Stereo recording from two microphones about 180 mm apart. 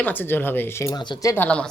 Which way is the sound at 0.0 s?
10° left (ahead or behind).